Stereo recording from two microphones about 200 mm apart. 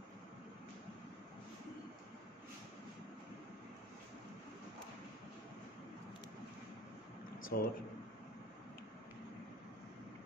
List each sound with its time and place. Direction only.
7.5 s speech: 50° left (ahead or behind)